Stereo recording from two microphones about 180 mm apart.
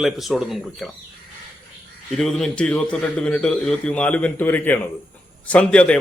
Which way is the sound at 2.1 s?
Centre (ahead or behind).